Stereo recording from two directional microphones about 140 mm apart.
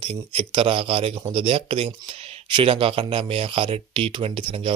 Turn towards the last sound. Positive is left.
turn(degrees=-40)  # may be behind; listen again after turning